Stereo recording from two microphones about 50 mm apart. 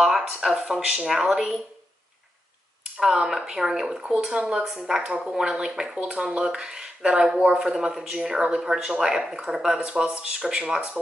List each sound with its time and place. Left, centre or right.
0.0 s a sound: centre
0.7 s speech: centre
3.0 s speech: centre
8.5 s speech: centre